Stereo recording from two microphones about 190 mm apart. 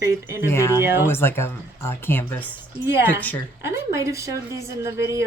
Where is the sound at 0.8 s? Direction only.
10° right (ahead or behind).